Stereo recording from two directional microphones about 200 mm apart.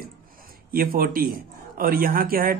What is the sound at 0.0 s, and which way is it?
A man's voice, 45° right (ahead or behind).